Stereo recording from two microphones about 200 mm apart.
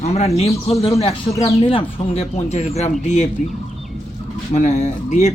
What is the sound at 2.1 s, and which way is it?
Speech, 30° left (ahead or behind).